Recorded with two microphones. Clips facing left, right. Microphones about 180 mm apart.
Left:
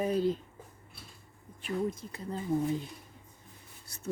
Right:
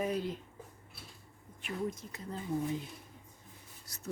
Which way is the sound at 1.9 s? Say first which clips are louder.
Left 4 dB; 30° left (ahead or behind).